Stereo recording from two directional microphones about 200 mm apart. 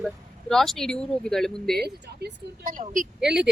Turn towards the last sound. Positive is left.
turn(degrees=-5)  # may be behind; listen again after turning